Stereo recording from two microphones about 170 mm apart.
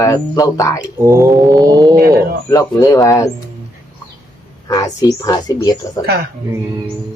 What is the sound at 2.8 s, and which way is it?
Speech, 20° left (ahead or behind).